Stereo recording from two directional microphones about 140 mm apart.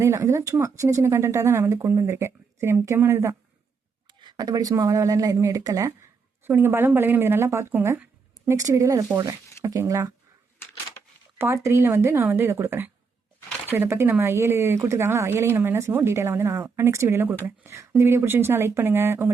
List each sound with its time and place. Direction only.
0.0 s speech: 20° right (ahead or behind)
4.0 s speech: 30° right (ahead or behind)
11.3 s speech: 20° right (ahead or behind)